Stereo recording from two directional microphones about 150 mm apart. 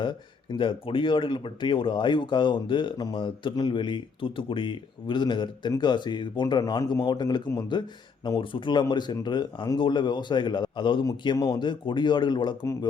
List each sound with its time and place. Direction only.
0.0 s speech: 30° left (ahead or behind)